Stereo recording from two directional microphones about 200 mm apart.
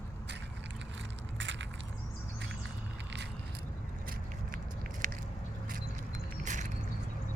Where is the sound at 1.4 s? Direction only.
65° right (ahead or behind).